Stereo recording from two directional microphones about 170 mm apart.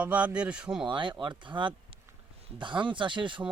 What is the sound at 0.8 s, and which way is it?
Speech, 30° right (ahead or behind).